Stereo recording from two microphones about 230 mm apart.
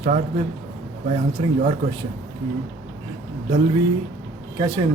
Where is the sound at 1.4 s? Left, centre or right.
Right.